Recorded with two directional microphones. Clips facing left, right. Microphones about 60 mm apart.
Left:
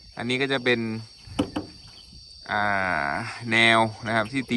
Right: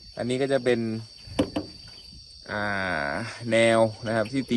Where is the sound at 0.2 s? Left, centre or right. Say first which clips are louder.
Right 1 dB; left.